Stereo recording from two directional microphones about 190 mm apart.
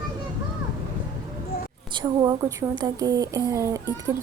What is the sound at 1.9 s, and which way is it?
Speech, 25° right (ahead or behind).